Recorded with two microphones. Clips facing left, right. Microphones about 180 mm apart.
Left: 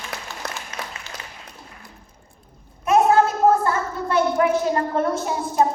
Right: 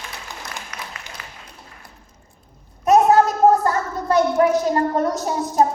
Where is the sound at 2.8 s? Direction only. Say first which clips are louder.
Right 2 dB; 40° right (ahead or behind).